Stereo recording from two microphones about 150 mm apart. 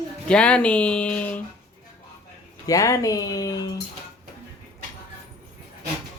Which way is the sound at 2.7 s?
25° left (ahead or behind).